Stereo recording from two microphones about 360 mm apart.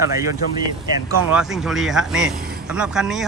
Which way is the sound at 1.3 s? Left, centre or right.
Centre.